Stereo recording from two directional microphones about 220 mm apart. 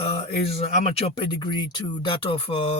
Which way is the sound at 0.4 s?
25° left (ahead or behind).